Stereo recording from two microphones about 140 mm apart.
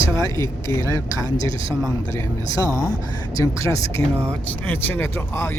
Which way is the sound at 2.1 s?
20° left (ahead or behind).